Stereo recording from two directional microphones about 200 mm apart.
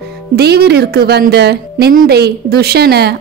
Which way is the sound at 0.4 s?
55° right (ahead or behind).